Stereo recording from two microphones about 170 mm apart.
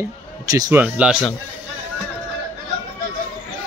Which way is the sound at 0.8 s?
5° right (ahead or behind).